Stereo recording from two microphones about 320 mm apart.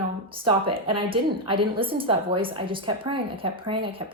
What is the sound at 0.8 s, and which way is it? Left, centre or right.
A woman's voice, centre.